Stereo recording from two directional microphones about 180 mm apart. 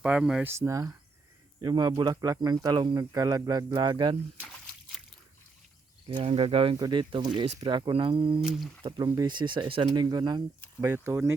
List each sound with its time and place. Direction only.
0.0 s speech: 5° right (ahead or behind)
0.6 s speech: 15° right (ahead or behind)
4.4 s a sound: 5° left (ahead or behind)
6.1 s speech: 30° right (ahead or behind)
8.4 s speech: centre (ahead or behind)
9.0 s speech: 20° right (ahead or behind)